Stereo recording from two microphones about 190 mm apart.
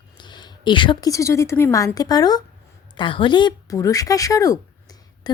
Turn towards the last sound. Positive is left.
turn(degrees=20)  # may be behind; listen again after turning